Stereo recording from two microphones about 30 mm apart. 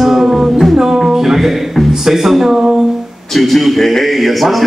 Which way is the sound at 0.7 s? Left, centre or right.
Centre.